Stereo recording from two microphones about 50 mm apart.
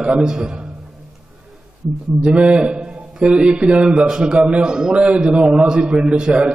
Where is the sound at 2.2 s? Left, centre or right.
Right.